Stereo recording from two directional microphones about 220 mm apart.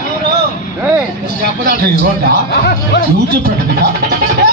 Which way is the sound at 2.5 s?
45° left (ahead or behind).